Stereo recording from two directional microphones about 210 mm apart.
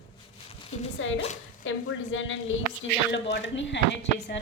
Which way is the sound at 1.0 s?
65° left (ahead or behind).